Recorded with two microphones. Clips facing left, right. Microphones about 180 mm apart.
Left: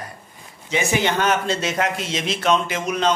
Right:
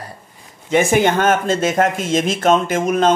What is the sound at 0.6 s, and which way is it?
Speech, 50° right (ahead or behind).